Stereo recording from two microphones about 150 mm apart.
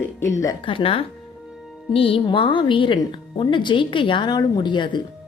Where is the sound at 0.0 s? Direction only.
20° left (ahead or behind).